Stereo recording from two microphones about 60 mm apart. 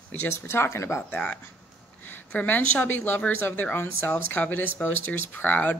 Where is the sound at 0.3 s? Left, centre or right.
Left.